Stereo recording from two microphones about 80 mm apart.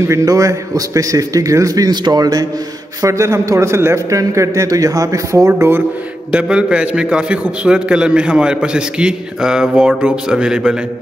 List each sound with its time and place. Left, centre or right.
0.1 s a man's voice: right
1.9 s a man's voice: right
3.0 s a man's voice: right
5.5 s speech: right
6.3 s a man's voice: centre